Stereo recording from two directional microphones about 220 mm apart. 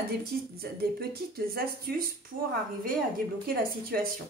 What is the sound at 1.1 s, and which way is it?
Speech, 40° right (ahead or behind).